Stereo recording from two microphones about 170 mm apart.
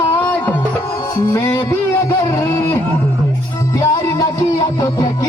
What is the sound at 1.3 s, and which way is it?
Music, 20° left (ahead or behind).